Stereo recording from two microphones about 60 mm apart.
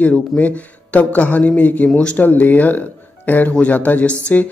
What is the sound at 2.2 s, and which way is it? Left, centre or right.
Speech, left.